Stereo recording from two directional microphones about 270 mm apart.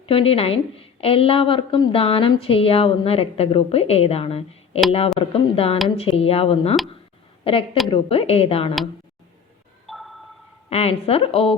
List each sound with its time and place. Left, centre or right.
0.1 s a woman's voice: left
9.8 s a sound: centre
10.7 s a woman's voice: left